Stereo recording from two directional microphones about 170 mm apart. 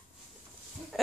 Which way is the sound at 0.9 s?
Centre (ahead or behind).